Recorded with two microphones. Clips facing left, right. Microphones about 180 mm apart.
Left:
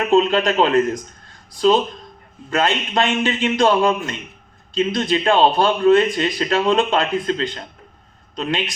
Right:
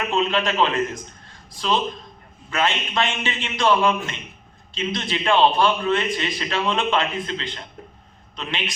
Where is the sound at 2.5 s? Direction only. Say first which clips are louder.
Left 4 dB; 40° left (ahead or behind).